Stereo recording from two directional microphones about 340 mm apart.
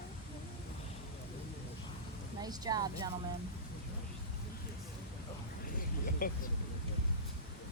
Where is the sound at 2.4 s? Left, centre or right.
Centre.